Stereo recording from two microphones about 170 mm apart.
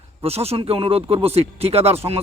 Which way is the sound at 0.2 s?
35° right (ahead or behind).